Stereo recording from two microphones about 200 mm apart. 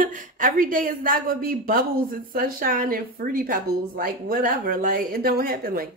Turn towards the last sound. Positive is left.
turn(degrees=-45)  # may be behind; listen again after turning